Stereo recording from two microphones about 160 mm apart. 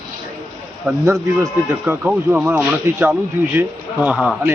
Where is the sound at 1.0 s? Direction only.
20° right (ahead or behind).